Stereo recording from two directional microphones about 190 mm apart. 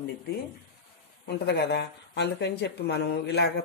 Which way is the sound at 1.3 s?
60° left (ahead or behind).